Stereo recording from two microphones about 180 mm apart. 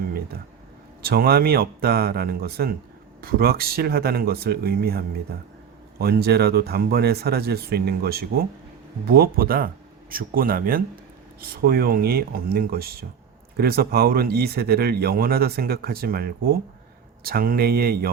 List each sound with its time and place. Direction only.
1.0 s speech: 55° right (ahead or behind)